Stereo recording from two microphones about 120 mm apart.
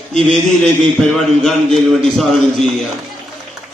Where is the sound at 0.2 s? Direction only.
50° right (ahead or behind).